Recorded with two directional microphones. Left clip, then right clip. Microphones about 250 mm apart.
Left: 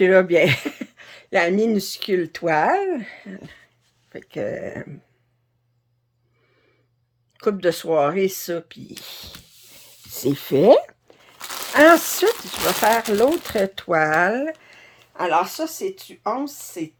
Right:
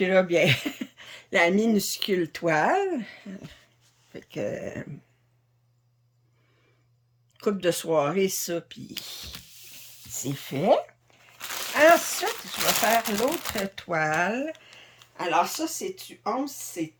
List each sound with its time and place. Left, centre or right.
0.0 s speech: centre
7.3 s speech: centre
10.2 s crumpling: left
12.8 s speech: left